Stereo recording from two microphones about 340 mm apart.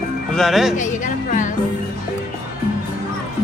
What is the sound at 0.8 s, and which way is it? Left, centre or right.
Music, left.